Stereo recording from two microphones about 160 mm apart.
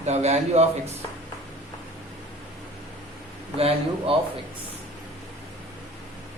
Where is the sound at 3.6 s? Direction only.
35° right (ahead or behind).